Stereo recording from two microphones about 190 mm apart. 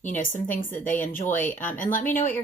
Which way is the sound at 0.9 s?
10° left (ahead or behind).